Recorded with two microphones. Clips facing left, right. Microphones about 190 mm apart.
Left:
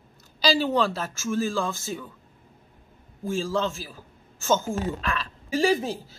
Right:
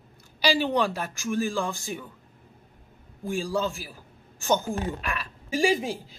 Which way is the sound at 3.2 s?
15° right (ahead or behind).